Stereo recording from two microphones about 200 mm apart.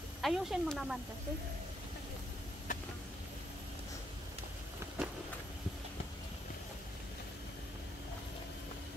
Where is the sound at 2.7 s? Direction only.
40° left (ahead or behind).